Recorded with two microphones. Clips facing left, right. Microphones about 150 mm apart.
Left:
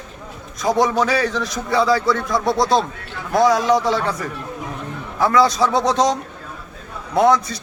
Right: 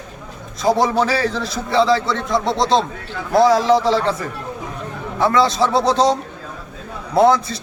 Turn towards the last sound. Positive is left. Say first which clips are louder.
# right 2 dB
turn(degrees=-30)  # may be behind; listen again after turning